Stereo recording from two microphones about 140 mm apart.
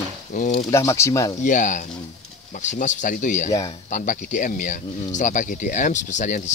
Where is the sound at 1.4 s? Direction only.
65° left (ahead or behind).